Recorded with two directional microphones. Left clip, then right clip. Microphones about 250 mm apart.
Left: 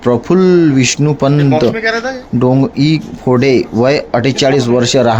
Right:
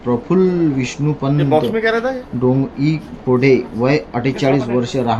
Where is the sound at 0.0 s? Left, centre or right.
Left.